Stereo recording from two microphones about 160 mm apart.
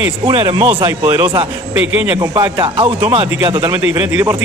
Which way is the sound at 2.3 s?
30° right (ahead or behind).